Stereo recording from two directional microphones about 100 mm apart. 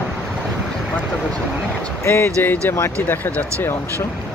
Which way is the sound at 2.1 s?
20° left (ahead or behind).